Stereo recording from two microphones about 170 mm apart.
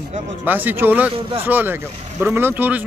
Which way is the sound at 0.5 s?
10° right (ahead or behind).